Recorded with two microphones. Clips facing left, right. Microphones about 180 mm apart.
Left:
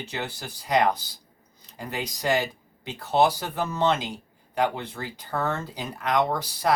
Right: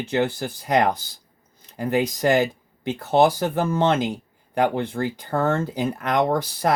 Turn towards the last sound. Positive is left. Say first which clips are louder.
# right 3 dB
turn(degrees=-50)  # may be behind; listen again after turning